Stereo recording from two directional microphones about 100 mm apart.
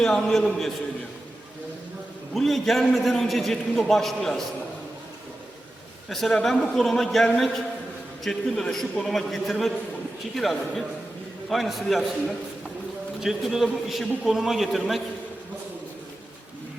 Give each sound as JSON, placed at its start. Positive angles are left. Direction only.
{"t": 0.0, "sound": "a man's voice", "side_deg": 5}
{"t": 2.3, "sound": "a man's voice", "side_deg": 0}
{"t": 6.1, "sound": "a man's voice", "side_deg": 0}
{"t": 13.2, "sound": "a man's voice", "side_deg": -5}